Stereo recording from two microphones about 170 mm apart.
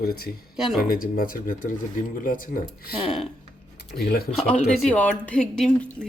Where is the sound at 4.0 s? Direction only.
65° left (ahead or behind).